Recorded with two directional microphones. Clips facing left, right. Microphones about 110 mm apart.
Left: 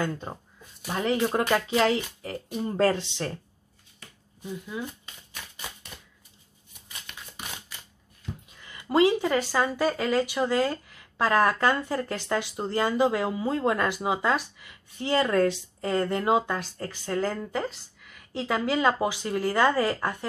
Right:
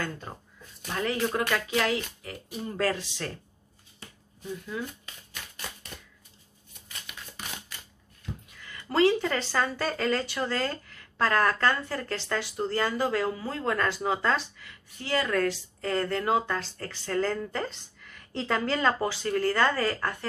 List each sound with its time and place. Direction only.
0.3 s speech: 20° left (ahead or behind)
4.5 s speech: 15° left (ahead or behind)
7.1 s a sound: 10° right (ahead or behind)
8.5 s speech: 20° left (ahead or behind)